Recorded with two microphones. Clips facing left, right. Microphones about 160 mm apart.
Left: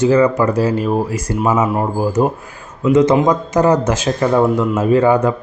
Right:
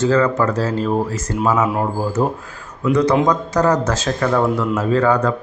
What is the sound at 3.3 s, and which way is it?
A man's voice, 20° left (ahead or behind).